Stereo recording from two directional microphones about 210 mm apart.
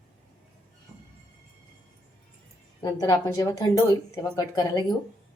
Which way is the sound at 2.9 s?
20° left (ahead or behind).